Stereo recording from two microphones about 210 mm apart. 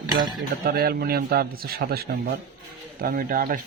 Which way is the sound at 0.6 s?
45° right (ahead or behind).